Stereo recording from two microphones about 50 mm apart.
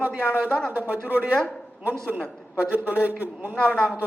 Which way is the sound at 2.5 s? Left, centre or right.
Right.